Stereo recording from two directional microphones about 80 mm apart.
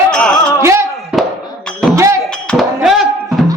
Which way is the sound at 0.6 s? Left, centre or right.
Right.